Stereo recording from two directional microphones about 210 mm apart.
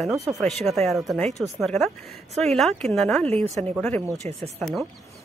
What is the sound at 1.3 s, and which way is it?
Speech, 15° right (ahead or behind).